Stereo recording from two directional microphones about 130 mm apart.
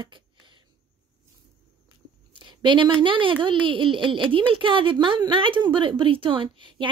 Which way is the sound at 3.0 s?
40° right (ahead or behind).